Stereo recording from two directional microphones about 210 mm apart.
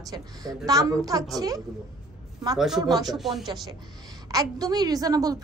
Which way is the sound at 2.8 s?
20° right (ahead or behind).